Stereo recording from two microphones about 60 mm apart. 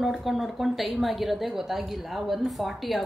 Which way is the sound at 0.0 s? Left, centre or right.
Centre.